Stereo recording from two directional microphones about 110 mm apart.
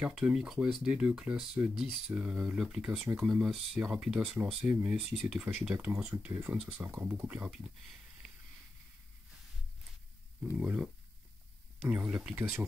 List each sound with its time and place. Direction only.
0.0 s speech: 10° right (ahead or behind)
7.5 s speech: 5° right (ahead or behind)
10.6 s speech: 10° right (ahead or behind)
11.9 s speech: 10° right (ahead or behind)